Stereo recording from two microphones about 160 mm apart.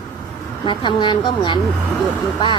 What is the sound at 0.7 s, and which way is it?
Speech, 30° left (ahead or behind).